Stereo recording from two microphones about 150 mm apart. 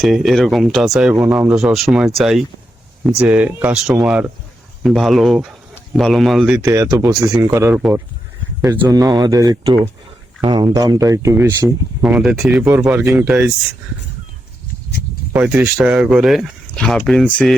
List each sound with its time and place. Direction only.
0.0 s speech: centre (ahead or behind)
6.6 s speech: 20° right (ahead or behind)
8.9 s speech: 25° right (ahead or behind); by 13.5 s 10° right (ahead or behind)
15.3 s speech: 10° right (ahead or behind)